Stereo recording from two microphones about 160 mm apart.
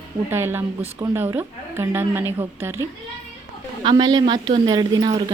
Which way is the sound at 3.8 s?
30° right (ahead or behind).